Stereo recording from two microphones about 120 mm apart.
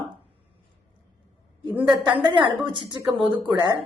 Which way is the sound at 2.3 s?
45° right (ahead or behind).